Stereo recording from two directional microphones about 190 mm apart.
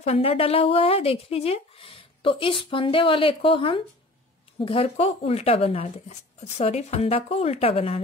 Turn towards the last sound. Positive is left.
turn(degrees=30)  # may be behind; listen again after turning